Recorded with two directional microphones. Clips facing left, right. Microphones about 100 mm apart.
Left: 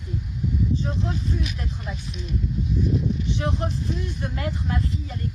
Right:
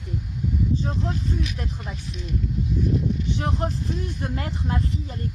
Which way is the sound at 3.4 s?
35° right (ahead or behind).